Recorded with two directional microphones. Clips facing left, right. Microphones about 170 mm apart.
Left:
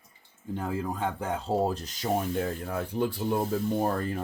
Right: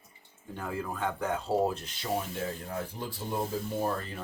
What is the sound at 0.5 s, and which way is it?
Speech, 25° left (ahead or behind).